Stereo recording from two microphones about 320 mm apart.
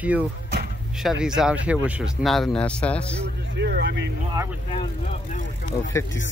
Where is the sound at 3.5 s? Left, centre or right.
Right.